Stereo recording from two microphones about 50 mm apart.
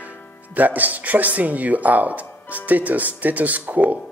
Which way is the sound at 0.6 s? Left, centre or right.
Right.